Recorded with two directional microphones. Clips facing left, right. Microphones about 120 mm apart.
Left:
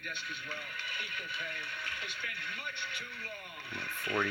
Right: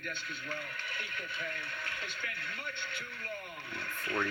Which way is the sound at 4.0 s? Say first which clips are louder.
Left 1 dB; 15° left (ahead or behind).